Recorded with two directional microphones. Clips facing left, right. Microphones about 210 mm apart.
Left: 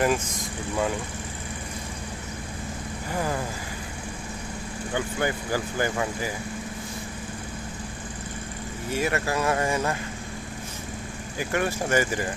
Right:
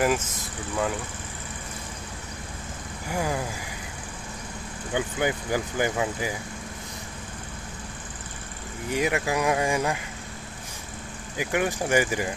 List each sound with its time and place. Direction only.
0.0 s speech: 5° right (ahead or behind)
3.1 s speech: 10° right (ahead or behind)
4.9 s speech: 15° right (ahead or behind)
8.9 s speech: 15° right (ahead or behind)
11.3 s speech: 15° right (ahead or behind)